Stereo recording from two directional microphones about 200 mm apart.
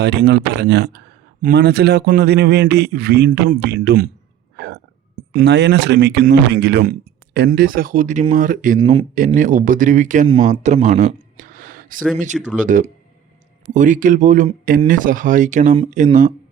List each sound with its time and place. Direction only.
0.0 s a man's voice: 55° right (ahead or behind)
4.5 s hiccup: 55° right (ahead or behind)
5.3 s a man's voice: 60° right (ahead or behind); by 8.8 s 40° right (ahead or behind)
8.8 s speech: 30° right (ahead or behind)